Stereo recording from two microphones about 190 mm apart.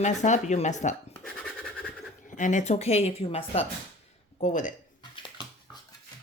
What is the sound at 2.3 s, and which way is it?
Speech, 45° left (ahead or behind).